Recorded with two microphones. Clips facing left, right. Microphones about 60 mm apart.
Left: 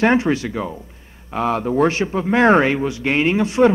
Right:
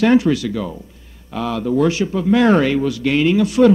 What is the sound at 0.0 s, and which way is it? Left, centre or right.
A man's voice, left.